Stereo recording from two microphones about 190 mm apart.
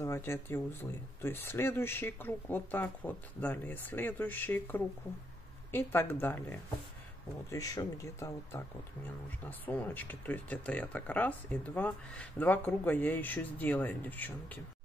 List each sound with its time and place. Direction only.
0.0 s speech: 15° left (ahead or behind)